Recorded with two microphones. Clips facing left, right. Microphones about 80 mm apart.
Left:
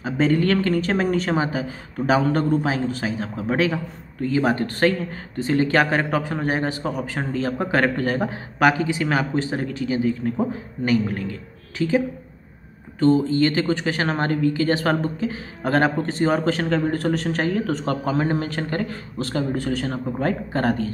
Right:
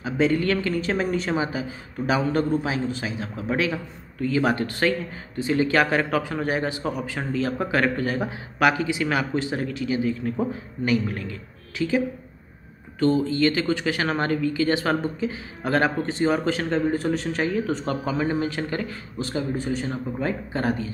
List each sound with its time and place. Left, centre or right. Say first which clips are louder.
0.0 s a woman's voice: left 2 dB; left
13.0 s a woman's voice: left 3 dB; left